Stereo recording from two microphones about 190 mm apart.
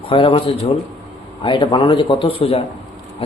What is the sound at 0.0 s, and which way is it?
A man's voice, 25° left (ahead or behind).